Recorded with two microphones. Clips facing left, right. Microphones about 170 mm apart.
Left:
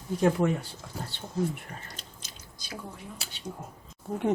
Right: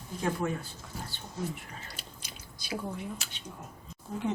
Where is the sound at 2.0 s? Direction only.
10° right (ahead or behind).